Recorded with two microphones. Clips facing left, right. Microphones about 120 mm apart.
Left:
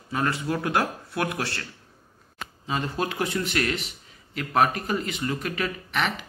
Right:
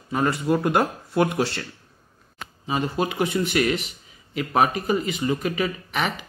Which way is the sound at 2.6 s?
10° right (ahead or behind).